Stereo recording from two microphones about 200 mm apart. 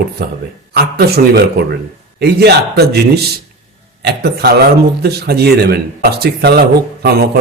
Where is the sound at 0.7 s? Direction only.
55° right (ahead or behind).